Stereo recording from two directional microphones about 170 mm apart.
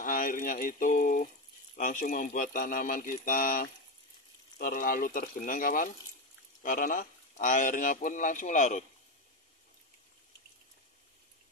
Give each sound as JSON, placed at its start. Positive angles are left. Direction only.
{"t": 0.0, "sound": "speech", "side_deg": 55}